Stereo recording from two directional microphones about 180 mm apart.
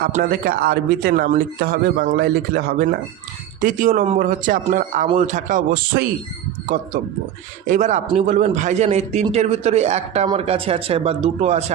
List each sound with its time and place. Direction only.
0.0 s speech: 55° right (ahead or behind)
7.7 s speech: 40° right (ahead or behind)